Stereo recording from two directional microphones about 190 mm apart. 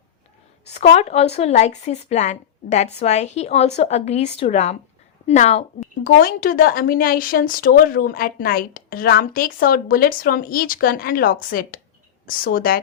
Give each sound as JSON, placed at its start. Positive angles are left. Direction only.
{"t": 0.7, "sound": "a woman's voice", "side_deg": 35}